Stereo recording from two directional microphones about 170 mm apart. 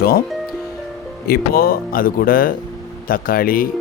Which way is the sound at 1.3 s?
60° left (ahead or behind).